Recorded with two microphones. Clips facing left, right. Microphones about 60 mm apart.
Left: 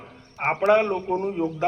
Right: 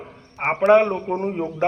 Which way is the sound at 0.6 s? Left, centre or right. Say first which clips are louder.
Right 5 dB; right.